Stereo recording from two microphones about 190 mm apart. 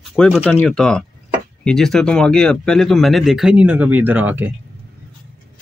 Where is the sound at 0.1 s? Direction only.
Centre (ahead or behind).